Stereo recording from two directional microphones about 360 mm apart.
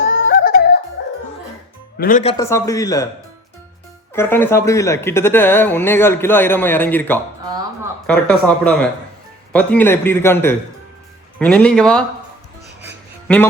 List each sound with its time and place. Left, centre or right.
0.0 s music: left
2.0 s speech: left
2.4 s speech: centre
4.1 s speech: centre
13.2 s speech: centre